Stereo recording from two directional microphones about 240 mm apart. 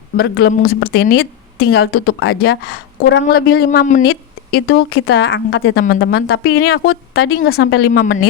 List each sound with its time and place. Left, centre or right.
0.2 s a woman's voice: left
5.8 s a woman's voice: left
7.9 s speech: left